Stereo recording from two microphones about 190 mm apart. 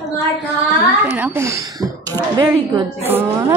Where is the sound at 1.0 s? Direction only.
10° right (ahead or behind).